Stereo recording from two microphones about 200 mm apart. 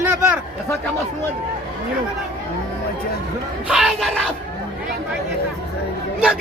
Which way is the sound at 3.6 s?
Centre (ahead or behind).